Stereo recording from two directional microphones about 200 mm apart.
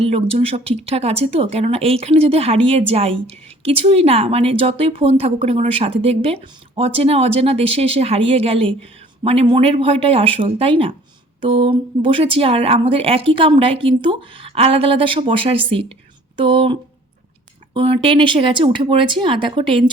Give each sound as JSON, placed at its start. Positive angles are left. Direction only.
{"t": 0.0, "sound": "a woman's voice", "side_deg": -30}
{"t": 17.7, "sound": "a woman's voice", "side_deg": -25}